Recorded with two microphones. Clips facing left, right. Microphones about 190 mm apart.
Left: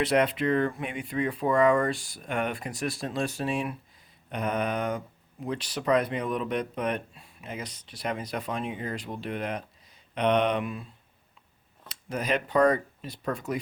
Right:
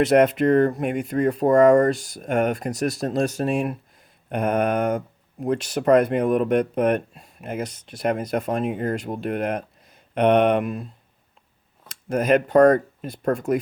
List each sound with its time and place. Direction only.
0.0 s speech: 45° right (ahead or behind)
11.9 s speech: 50° right (ahead or behind)